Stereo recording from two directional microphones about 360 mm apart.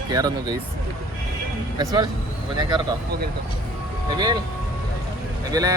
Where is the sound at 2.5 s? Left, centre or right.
Centre.